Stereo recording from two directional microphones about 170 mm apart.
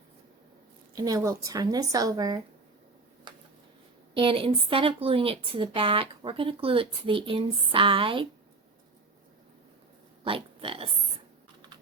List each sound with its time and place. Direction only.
0.9 s speech: 20° right (ahead or behind)
4.1 s speech: 30° right (ahead or behind)
10.2 s pig: 30° right (ahead or behind)